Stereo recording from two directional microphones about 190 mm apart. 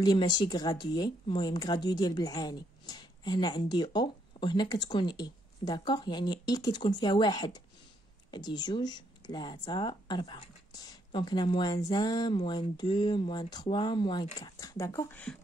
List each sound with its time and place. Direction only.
0.0 s speech: 25° left (ahead or behind)